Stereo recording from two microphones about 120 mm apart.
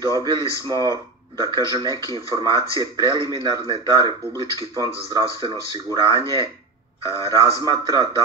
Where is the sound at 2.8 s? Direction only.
45° right (ahead or behind).